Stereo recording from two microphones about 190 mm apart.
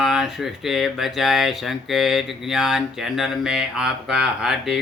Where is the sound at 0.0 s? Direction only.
Centre (ahead or behind).